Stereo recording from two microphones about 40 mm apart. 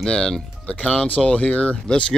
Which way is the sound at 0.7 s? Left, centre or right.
Left.